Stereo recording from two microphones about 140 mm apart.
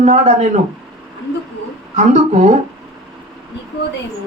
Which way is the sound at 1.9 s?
60° right (ahead or behind).